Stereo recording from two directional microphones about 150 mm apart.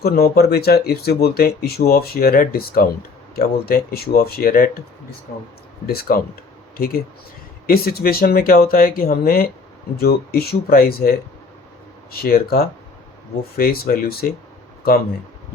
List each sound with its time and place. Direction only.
0.0 s speech: 90° left; by 4.8 s 75° left (ahead or behind)
5.8 s speech: 90° left
6.7 s speech: 75° left (ahead or behind)
7.7 s speech: 90° left
10.0 s speech: 90° left